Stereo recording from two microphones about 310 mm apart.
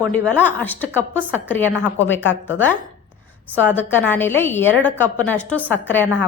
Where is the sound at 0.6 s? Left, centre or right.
Centre.